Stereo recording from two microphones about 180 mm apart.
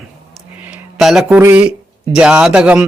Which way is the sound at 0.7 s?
Centre (ahead or behind).